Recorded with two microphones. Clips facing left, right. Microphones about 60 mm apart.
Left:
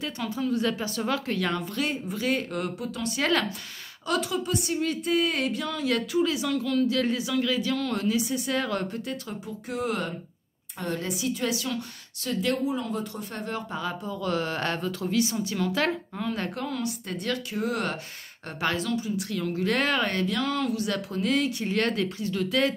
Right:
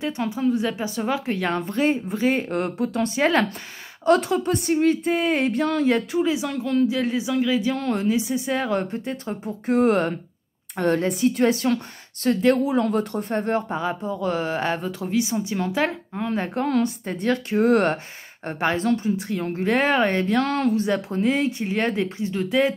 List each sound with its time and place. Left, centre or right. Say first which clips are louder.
0.0 s speech: right 6 dB; right
3.2 s speech: right 5 dB; right
4.0 s speech: right 9 dB; right
5.9 s speech: right 4 dB; right
6.9 s speech: right 3 dB; centre; by 9.4 s right
9.7 s speech: right 11 dB; right
12.6 s speech: right 7 dB; right
13.7 s speech: right 6 dB; right
16.6 s speech: right 9 dB; right
17.5 s speech: right 13 dB; right
18.5 s speech: right 6 dB; right
20.3 s speech: right 6 dB; right
20.7 s speech: right 6 dB; right